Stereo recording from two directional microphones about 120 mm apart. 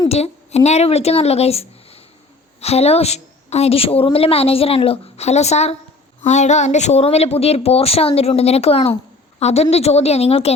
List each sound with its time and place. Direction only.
0.1 s a woman's voice: 65° left (ahead or behind)
6.2 s a woman's voice: 75° left (ahead or behind); by 10.5 s 60° left (ahead or behind)